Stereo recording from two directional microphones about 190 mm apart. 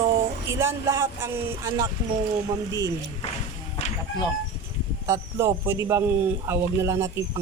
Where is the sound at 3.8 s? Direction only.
35° left (ahead or behind).